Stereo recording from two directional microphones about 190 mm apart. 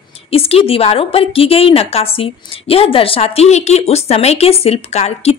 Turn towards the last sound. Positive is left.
turn(degrees=35)  # may be behind; listen again after turning